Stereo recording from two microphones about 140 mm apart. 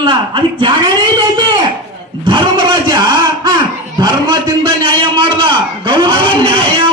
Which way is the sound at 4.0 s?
30° right (ahead or behind).